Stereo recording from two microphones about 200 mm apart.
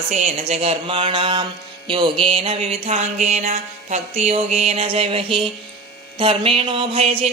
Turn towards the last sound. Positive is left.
turn(degrees=-30)  # may be behind; listen again after turning